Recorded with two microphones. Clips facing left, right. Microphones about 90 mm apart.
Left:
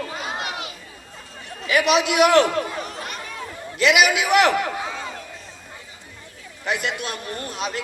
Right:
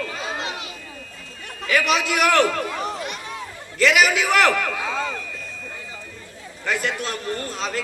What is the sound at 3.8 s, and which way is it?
A man's voice, 20° left (ahead or behind).